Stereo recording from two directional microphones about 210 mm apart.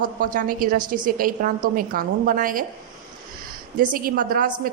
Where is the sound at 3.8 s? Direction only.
40° right (ahead or behind).